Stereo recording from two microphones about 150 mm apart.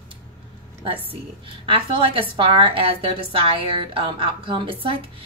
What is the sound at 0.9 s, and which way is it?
A woman's voice, 35° right (ahead or behind).